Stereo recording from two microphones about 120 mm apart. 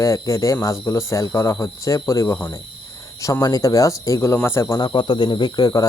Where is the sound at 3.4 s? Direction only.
30° left (ahead or behind).